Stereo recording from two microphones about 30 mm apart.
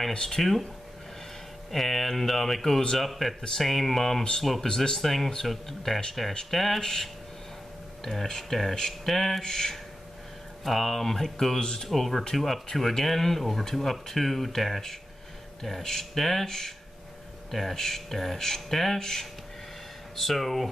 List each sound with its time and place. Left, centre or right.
0.1 s speech: left
0.4 s speech: centre
1.7 s speech: centre
4.6 s speech: left
4.9 s speech: centre
9.4 s speech: centre
10.6 s speech: centre
11.9 s speech: centre